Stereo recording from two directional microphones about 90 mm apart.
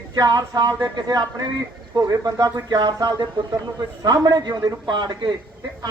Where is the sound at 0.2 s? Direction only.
45° right (ahead or behind).